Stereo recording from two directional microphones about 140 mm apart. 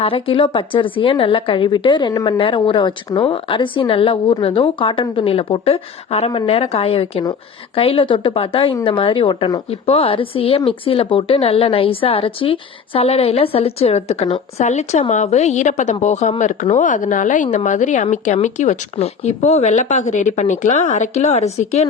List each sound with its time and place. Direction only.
0.0 s a woman's voice: 40° left (ahead or behind)